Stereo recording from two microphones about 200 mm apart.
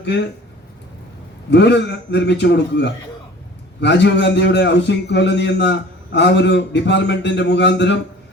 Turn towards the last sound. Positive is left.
turn(degrees=60)  # may be behind; listen again after turning